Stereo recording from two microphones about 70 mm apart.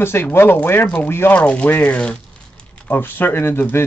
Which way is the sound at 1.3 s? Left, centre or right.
Centre.